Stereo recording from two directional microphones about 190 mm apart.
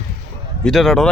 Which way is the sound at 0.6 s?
Centre (ahead or behind).